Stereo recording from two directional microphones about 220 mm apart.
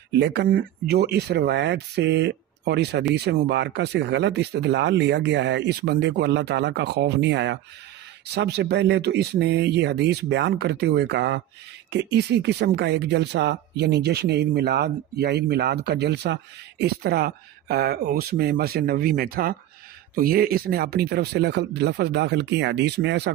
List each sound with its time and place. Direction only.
0.1 s speech: 50° right (ahead or behind)